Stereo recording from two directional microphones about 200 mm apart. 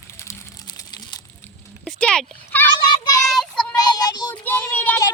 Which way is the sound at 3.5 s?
20° left (ahead or behind).